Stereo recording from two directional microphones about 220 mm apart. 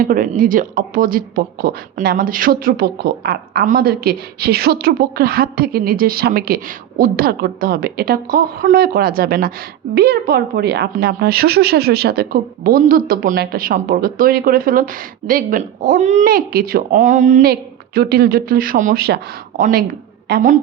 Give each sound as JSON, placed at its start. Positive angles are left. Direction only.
{"t": 0.0, "sound": "speech", "side_deg": -40}